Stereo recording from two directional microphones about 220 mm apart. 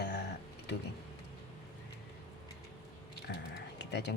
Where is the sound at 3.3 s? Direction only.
50° left (ahead or behind).